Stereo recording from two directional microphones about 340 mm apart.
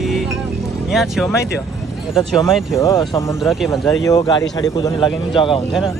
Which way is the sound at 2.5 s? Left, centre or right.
Centre.